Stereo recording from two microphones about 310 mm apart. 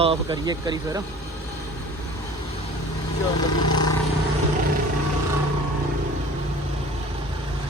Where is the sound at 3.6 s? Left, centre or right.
Centre.